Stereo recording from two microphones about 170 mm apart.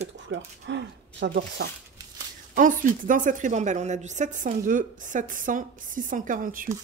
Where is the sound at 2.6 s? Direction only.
50° right (ahead or behind).